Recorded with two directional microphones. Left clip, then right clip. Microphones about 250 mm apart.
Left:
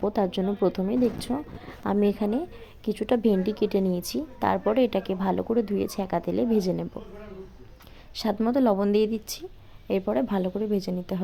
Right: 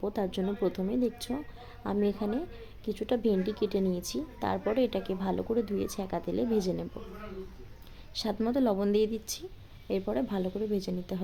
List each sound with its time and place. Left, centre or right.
0.0 s a woman's voice: centre
8.1 s a woman's voice: centre